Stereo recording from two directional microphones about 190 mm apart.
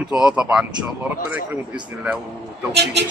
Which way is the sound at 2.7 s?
60° right (ahead or behind).